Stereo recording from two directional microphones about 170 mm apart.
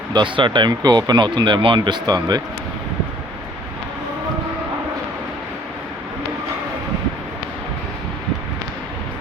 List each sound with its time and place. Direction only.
0.1 s speech: 30° right (ahead or behind)